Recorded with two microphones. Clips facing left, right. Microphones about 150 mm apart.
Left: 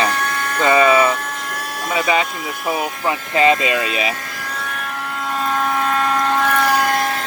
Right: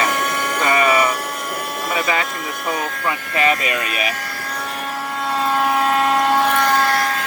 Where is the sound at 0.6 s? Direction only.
25° left (ahead or behind).